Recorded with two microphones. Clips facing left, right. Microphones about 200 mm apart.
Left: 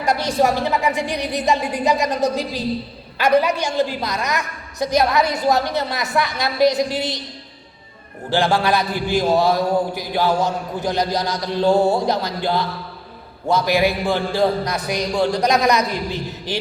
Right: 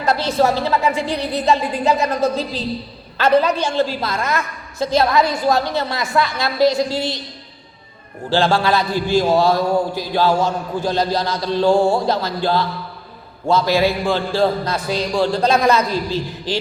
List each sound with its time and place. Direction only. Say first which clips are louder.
0.0 s a woman's voice: right 1 dB; 15° left (ahead or behind)
8.3 s a man's voice: right 1 dB; 15° left (ahead or behind)